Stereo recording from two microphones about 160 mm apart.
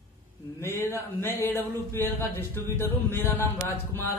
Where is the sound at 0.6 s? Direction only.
15° left (ahead or behind).